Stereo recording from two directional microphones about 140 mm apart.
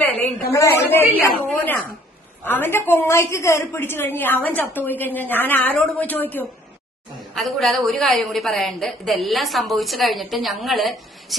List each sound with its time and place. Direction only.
0.0 s a sound: 10° left (ahead or behind)
0.5 s a woman's voice: 20° left (ahead or behind)
7.3 s a woman's voice: centre (ahead or behind)